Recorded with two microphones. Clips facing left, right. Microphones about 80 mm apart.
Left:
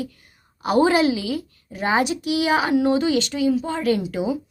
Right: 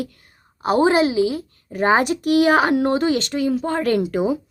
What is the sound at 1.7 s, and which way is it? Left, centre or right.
Speech, right.